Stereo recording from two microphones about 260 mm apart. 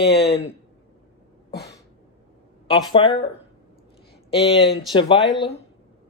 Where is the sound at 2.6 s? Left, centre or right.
Centre.